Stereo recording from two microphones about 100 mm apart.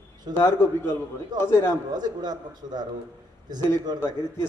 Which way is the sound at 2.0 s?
45° right (ahead or behind).